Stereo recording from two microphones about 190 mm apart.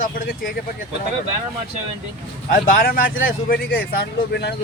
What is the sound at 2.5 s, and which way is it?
Speech, 45° left (ahead or behind).